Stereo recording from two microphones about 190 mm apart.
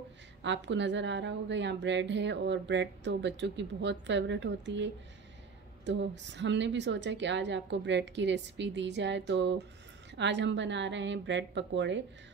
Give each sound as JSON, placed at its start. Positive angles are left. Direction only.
{"t": 0.4, "sound": "a woman's voice", "side_deg": -70}